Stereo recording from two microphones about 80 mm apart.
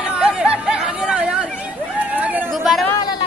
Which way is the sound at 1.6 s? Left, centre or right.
Centre.